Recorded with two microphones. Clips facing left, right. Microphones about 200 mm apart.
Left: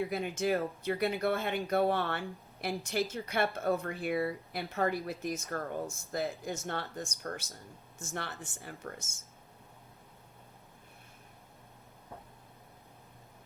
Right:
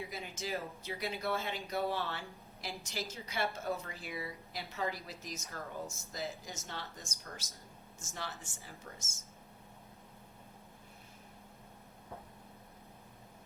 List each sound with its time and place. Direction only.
0.0 s speech: 60° left (ahead or behind)